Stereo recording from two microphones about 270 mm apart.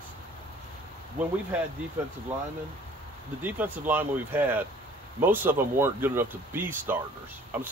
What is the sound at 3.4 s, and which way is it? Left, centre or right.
Speech, centre.